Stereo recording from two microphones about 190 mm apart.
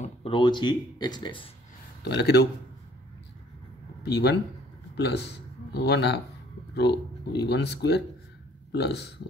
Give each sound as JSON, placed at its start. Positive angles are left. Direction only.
{"t": 0.0, "sound": "speech", "side_deg": 30}
{"t": 2.0, "sound": "speech", "side_deg": 60}
{"t": 4.0, "sound": "speech", "side_deg": 60}